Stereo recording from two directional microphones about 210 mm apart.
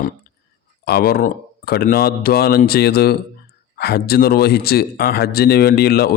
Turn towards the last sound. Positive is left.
turn(degrees=50)  # may be behind; listen again after turning